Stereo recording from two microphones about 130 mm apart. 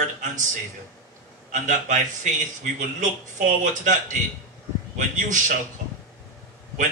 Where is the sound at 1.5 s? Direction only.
75° right (ahead or behind).